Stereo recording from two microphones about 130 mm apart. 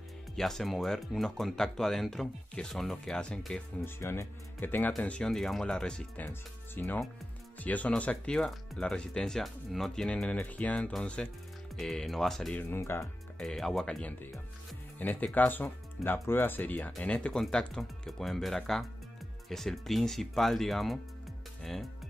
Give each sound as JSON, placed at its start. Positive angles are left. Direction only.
{"t": 0.4, "sound": "speech", "side_deg": 0}
{"t": 3.8, "sound": "speech", "side_deg": 20}
{"t": 12.6, "sound": "speech", "side_deg": 20}
{"t": 13.4, "sound": "speech", "side_deg": 5}